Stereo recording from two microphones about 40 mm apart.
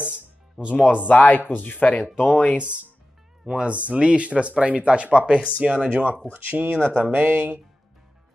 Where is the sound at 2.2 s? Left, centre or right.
Left.